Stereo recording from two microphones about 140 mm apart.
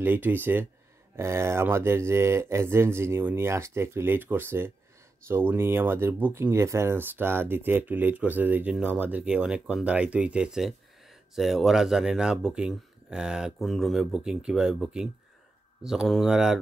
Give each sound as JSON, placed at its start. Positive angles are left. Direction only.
{"t": 0.0, "sound": "speech", "side_deg": -15}